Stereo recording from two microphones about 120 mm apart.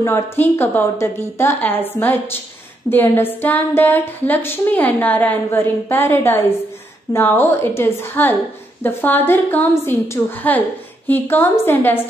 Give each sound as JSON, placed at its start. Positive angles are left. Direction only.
{"t": 0.0, "sound": "a woman's voice", "side_deg": 20}